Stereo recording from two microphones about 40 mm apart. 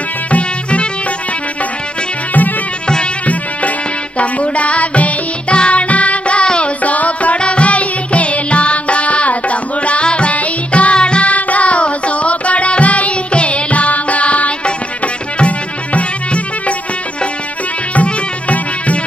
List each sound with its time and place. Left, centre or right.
0.3 s music: left
4.2 s music: left
6.8 s music: left
17.9 s music: left